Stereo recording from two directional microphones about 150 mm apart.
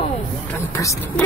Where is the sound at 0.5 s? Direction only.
15° left (ahead or behind).